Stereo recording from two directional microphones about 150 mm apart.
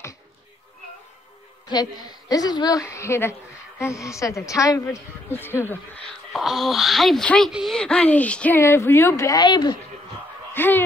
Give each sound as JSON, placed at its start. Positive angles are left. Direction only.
{"t": 1.7, "sound": "a woman's voice", "side_deg": 25}
{"t": 6.3, "sound": "speech", "side_deg": 0}
{"t": 10.5, "sound": "speech", "side_deg": 15}